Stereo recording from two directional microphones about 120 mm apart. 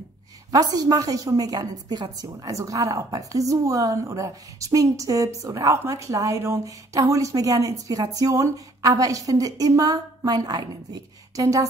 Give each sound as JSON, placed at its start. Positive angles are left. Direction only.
{"t": 0.5, "sound": "a woman's voice", "side_deg": -30}